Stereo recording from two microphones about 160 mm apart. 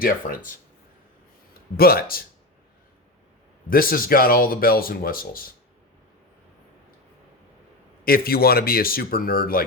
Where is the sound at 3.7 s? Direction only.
65° left (ahead or behind).